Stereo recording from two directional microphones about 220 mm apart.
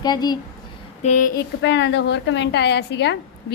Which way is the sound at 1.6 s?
50° left (ahead or behind).